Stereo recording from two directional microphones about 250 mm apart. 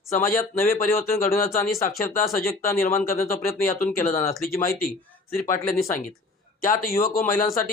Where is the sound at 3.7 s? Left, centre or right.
Left.